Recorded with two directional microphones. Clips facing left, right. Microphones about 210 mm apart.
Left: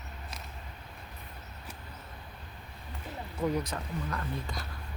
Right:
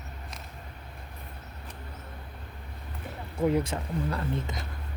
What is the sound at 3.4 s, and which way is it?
Speech, 25° right (ahead or behind).